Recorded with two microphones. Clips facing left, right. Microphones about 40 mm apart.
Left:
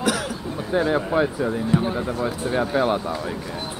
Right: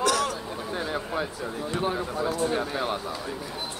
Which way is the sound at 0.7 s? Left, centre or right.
Left.